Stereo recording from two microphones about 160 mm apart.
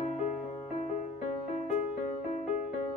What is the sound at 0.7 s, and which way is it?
Music, 45° left (ahead or behind).